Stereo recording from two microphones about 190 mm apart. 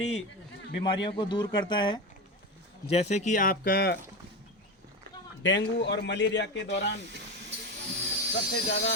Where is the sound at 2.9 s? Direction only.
35° left (ahead or behind).